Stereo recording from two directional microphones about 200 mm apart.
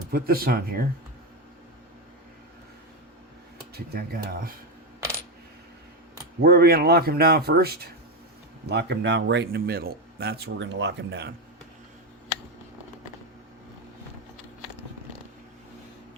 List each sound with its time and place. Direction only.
0.1 s speech: 50° right (ahead or behind)
3.8 s speech: 50° right (ahead or behind)
6.4 s speech: 50° right (ahead or behind)